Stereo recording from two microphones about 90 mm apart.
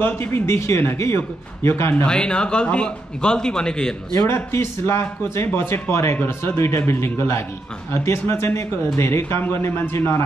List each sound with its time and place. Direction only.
0.0 s speech: 25° left (ahead or behind)
2.0 s a man's voice: 10° left (ahead or behind)
4.3 s speech: 30° left (ahead or behind)